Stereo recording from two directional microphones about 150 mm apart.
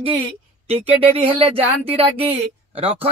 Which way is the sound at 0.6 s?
40° right (ahead or behind).